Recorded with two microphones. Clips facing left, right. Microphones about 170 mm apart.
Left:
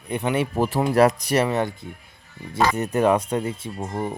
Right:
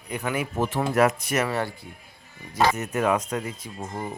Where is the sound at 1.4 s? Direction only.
20° left (ahead or behind).